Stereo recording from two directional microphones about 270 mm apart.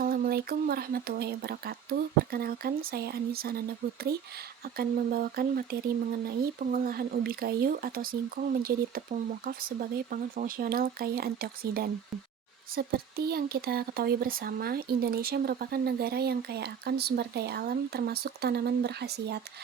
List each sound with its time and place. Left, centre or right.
0.0 s speech: right
4.8 s speech: right